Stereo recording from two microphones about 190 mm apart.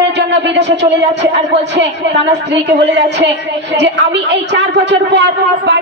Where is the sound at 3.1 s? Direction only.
65° right (ahead or behind).